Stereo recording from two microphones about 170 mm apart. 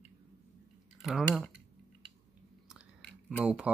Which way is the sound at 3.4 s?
5° right (ahead or behind).